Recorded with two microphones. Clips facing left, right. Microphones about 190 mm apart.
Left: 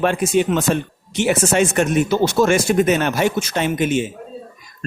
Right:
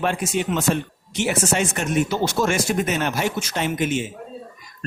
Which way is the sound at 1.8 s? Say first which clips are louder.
Left 5 dB; 60° left (ahead or behind).